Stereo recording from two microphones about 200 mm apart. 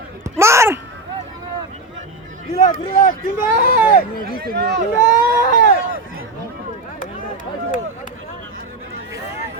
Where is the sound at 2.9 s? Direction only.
45° left (ahead or behind).